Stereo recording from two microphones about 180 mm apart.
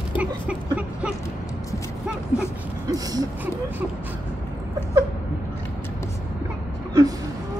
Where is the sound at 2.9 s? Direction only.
20° right (ahead or behind).